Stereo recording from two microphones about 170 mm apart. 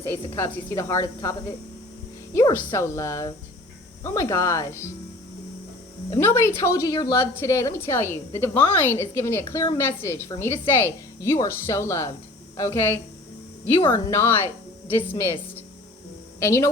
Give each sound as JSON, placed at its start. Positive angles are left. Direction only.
{"t": 0.3, "sound": "a woman's voice", "side_deg": 15}
{"t": 6.1, "sound": "a woman's voice", "side_deg": 15}
{"t": 16.4, "sound": "a woman's voice", "side_deg": 15}